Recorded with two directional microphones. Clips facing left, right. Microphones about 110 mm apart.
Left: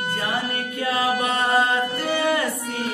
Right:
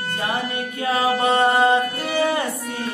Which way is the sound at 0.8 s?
25° right (ahead or behind).